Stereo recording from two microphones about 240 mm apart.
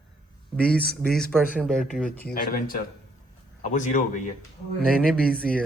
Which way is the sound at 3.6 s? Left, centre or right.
Left.